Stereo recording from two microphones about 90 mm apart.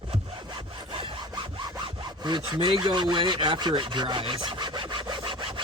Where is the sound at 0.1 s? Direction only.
70° right (ahead or behind).